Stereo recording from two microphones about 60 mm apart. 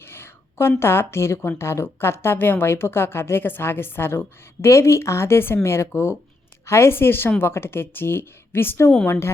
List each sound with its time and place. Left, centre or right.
0.0 s a sound: left
0.8 s a woman's voice: left
4.7 s a woman's voice: left